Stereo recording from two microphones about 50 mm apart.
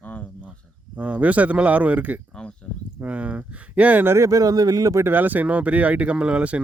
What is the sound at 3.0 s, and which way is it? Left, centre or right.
Speech, right.